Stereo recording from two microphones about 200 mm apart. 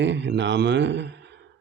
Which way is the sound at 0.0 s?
60° right (ahead or behind).